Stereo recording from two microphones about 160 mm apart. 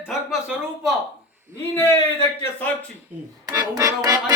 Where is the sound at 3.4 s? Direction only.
25° right (ahead or behind).